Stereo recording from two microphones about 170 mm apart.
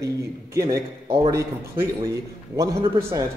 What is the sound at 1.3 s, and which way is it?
Speech, 20° right (ahead or behind).